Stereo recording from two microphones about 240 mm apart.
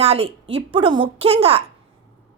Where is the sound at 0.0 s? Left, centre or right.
Right.